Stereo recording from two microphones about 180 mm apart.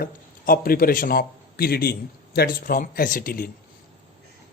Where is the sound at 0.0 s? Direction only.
55° left (ahead or behind).